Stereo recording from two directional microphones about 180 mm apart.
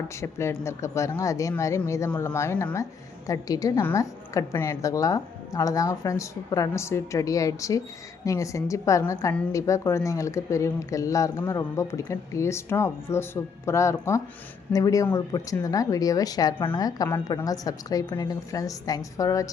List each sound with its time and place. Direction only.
0.2 s a woman's voice: 15° left (ahead or behind)